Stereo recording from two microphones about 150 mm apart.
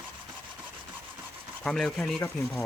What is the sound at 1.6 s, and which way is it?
Speech, 5° left (ahead or behind).